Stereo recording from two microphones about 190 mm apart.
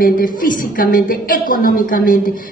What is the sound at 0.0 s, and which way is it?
A woman's voice, 45° left (ahead or behind).